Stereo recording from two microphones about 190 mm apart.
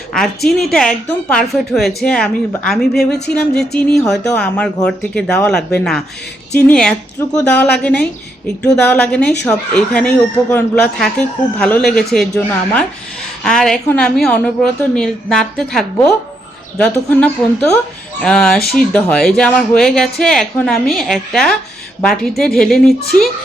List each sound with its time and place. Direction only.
0.1 s speech: 5° left (ahead or behind)
13.4 s speech: 5° left (ahead or behind)